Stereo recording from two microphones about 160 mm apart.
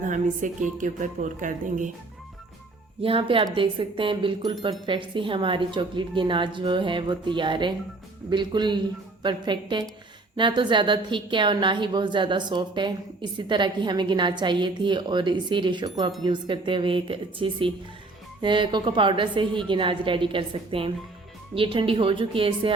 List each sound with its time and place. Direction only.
0.0 s a woman's voice: 55° right (ahead or behind)
3.0 s a woman's voice: 35° right (ahead or behind)